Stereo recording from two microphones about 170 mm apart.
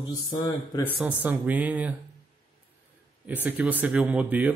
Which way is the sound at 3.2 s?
10° right (ahead or behind).